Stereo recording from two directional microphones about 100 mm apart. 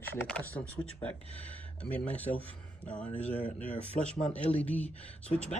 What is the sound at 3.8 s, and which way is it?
Speech, 90° right.